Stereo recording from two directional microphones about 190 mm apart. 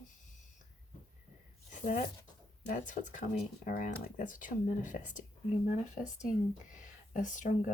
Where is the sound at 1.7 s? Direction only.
40° left (ahead or behind).